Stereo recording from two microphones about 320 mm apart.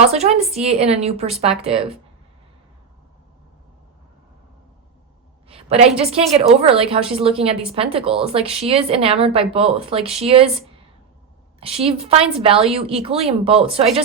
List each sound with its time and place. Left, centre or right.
0.0 s a woman's voice: centre
5.5 s a sound: centre
6.0 s a woman's voice: centre
11.6 s a woman's voice: centre